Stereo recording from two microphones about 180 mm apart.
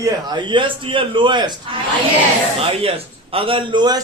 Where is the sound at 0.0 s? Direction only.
25° right (ahead or behind).